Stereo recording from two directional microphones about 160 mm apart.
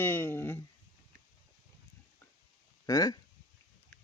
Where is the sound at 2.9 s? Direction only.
20° left (ahead or behind).